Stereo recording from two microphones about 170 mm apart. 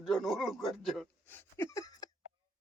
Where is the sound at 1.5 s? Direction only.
15° left (ahead or behind).